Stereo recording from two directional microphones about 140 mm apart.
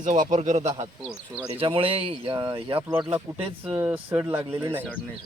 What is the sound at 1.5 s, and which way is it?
Speech, 40° right (ahead or behind).